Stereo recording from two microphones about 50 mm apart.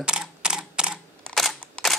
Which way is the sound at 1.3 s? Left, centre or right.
Centre.